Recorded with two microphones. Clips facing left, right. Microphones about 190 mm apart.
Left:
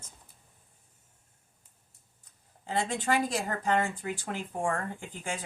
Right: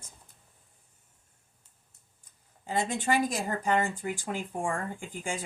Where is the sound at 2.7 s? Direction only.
10° right (ahead or behind).